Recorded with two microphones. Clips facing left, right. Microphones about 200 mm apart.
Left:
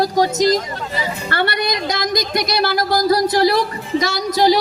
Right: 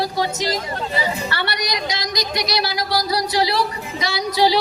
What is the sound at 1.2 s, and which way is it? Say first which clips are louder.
Speech: left 5 dB; 50° left (ahead or behind).